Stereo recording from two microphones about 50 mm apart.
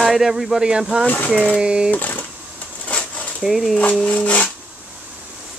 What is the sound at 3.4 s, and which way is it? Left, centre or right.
Speech, centre.